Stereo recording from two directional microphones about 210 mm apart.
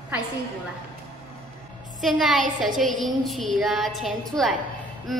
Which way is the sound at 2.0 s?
Centre (ahead or behind).